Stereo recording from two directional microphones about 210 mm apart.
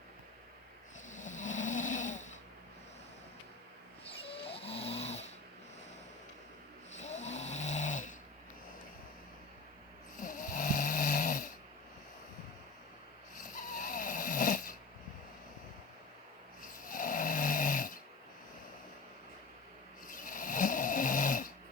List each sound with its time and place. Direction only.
1.0 s snoring: 35° left (ahead or behind)
4.0 s snoring: 25° left (ahead or behind)
6.9 s snoring: 35° left (ahead or behind)
10.2 s snoring: 40° left (ahead or behind)
13.5 s snoring: 40° left (ahead or behind)
16.8 s snoring: 40° left (ahead or behind)
20.1 s snoring: 40° left (ahead or behind)